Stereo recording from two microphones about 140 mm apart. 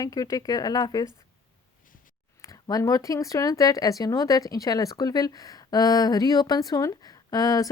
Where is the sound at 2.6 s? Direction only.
25° left (ahead or behind).